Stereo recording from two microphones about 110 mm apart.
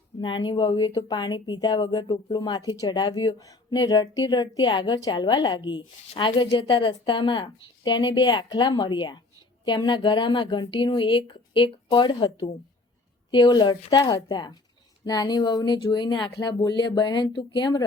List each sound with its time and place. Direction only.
0.2 s a woman's voice: 45° left (ahead or behind)